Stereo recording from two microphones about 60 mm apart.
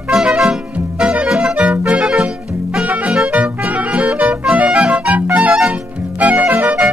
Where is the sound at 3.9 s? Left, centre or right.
Right.